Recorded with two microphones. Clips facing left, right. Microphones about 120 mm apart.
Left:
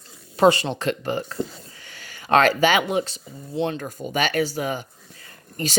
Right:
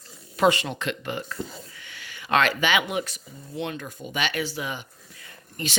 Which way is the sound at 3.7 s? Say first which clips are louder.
Left 6 dB; 45° left (ahead or behind).